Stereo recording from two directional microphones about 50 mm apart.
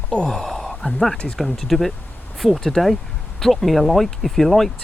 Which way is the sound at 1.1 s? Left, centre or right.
Left.